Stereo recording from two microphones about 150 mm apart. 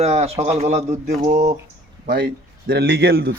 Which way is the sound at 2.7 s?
90° right.